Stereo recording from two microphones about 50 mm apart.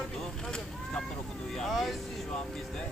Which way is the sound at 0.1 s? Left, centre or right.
Centre.